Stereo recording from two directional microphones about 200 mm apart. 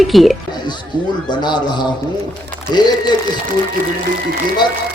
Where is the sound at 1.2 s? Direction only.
20° left (ahead or behind).